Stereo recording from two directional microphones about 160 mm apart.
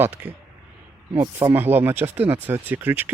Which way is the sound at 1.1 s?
25° right (ahead or behind).